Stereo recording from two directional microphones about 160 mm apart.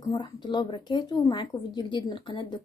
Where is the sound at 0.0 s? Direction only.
25° left (ahead or behind).